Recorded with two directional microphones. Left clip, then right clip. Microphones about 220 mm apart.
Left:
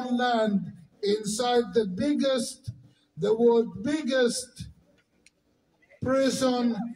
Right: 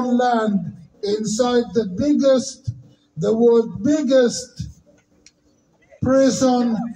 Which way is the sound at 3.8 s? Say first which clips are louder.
Right 9 dB; 20° left (ahead or behind).